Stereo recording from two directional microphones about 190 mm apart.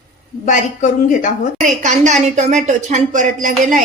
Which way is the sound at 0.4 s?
40° left (ahead or behind).